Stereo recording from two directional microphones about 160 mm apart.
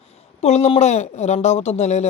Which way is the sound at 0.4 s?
40° left (ahead or behind).